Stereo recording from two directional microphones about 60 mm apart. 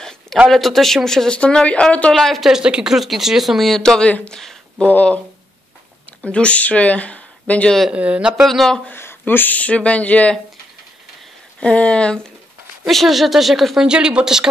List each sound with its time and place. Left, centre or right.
0.5 s speech: centre
2.1 s speech: centre
2.6 s speech: centre
4.7 s speech: left
6.2 s speech: centre
7.9 s speech: right
8.5 s speech: centre
8.9 s speech: left
11.6 s speech: centre
12.8 s speech: centre
13.8 s speech: centre